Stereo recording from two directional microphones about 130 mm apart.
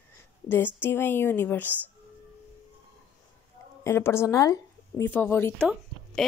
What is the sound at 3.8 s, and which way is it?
Speech, 20° left (ahead or behind).